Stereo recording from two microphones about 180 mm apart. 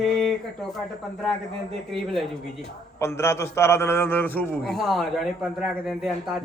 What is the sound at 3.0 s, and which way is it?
A man's voice, 15° left (ahead or behind).